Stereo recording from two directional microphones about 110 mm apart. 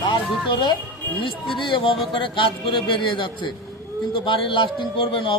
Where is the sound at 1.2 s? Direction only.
50° left (ahead or behind).